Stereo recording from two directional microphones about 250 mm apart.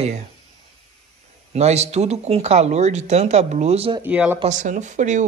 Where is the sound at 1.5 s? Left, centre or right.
Right.